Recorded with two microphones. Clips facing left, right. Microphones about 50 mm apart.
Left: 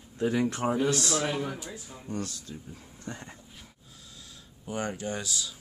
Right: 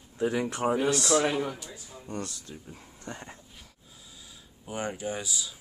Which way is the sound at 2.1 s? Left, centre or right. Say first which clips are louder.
Left 1 dB; centre.